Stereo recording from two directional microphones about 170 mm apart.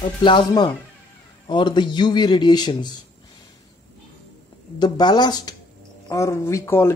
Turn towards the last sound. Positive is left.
turn(degrees=15)  # may be behind; listen again after turning